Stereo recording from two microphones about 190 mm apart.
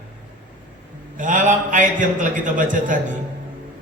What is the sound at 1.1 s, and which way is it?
A man's voice, 40° right (ahead or behind).